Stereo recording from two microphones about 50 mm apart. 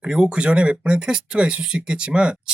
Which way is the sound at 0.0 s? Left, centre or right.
Centre.